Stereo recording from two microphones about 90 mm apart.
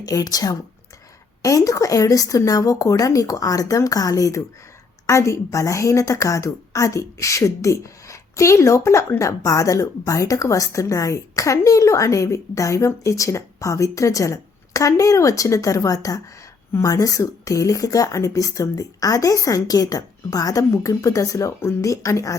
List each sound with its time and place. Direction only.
0.0 s a woman's voice: 45° left (ahead or behind)